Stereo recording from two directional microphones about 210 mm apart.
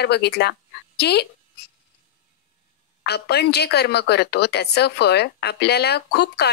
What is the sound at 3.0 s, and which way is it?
Speech, 50° left (ahead or behind).